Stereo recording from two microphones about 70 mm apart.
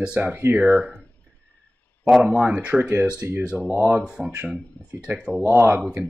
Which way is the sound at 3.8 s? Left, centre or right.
Right.